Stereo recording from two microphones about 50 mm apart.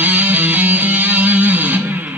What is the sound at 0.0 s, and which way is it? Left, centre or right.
Music, right.